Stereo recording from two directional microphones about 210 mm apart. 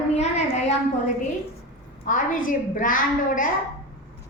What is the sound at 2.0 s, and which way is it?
A woman's voice, 40° left (ahead or behind).